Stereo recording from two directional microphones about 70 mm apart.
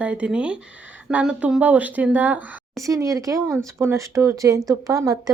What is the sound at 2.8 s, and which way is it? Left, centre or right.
Speech, right.